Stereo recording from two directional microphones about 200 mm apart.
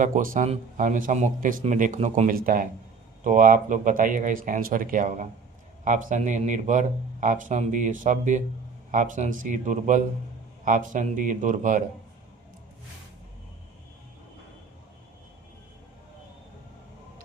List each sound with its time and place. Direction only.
0.0 s speech: 40° right (ahead or behind)